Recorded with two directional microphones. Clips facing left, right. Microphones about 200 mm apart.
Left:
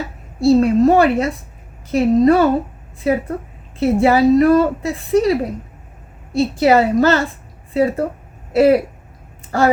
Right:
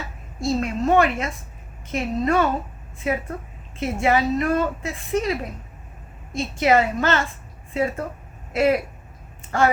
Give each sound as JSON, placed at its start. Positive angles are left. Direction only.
{"t": 0.3, "sound": "a woman's voice", "side_deg": 35}